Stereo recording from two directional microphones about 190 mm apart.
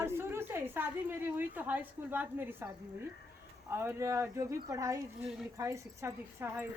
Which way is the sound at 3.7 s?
15° right (ahead or behind).